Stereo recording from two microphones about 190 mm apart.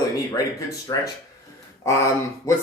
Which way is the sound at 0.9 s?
15° left (ahead or behind).